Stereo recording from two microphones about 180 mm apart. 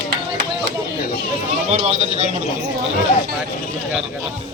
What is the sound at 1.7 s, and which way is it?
Speech, 40° right (ahead or behind).